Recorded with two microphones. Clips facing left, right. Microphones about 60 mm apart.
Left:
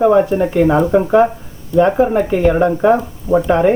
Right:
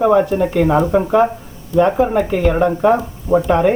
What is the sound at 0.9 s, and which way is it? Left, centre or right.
Speech, centre.